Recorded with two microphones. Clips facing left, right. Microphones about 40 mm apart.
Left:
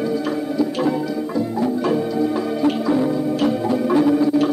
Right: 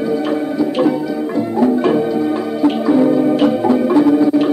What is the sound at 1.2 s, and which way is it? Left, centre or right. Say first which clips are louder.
Music: right 6 dB; right.